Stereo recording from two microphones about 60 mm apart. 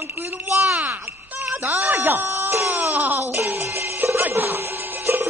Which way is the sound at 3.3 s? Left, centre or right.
Right.